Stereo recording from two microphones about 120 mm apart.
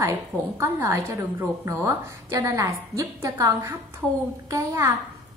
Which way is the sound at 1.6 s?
25° right (ahead or behind).